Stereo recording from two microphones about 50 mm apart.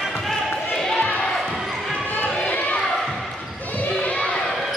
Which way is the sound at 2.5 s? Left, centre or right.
Left.